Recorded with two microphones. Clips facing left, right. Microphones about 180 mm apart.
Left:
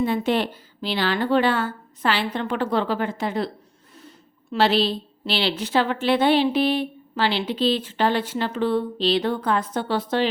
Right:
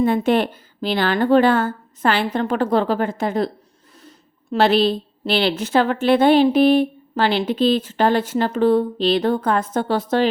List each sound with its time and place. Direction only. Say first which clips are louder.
0.0 s a woman's voice: right 5 dB; 50° right (ahead or behind)
4.5 s a woman's voice: right 4 dB; 50° right (ahead or behind)